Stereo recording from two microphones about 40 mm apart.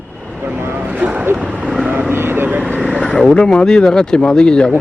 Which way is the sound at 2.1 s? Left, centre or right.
Right.